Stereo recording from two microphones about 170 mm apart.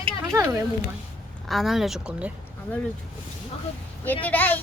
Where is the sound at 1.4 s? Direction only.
Centre (ahead or behind).